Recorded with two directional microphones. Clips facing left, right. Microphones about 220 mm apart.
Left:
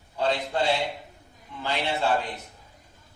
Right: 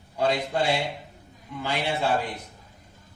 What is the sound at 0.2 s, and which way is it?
Speech, 10° right (ahead or behind).